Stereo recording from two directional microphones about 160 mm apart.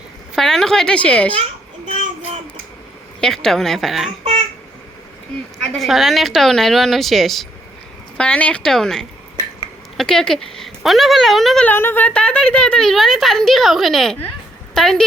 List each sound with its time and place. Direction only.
0.3 s speech: 5° left (ahead or behind)
3.2 s speech: 5° left (ahead or behind)
4.2 s a sound: 40° right (ahead or behind)
5.6 s speech: centre (ahead or behind)